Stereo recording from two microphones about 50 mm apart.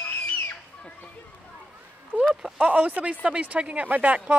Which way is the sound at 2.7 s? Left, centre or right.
Right.